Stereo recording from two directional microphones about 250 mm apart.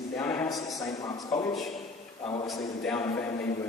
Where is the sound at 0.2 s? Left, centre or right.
Centre.